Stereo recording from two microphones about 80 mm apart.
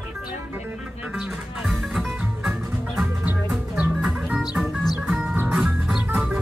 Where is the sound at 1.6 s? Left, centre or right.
Centre.